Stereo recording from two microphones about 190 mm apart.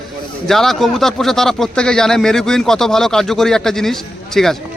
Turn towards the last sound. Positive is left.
turn(degrees=0)  # may be behind; listen again after turning